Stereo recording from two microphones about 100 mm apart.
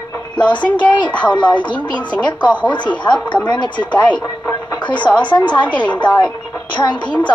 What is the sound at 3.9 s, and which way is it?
Speech, 15° left (ahead or behind).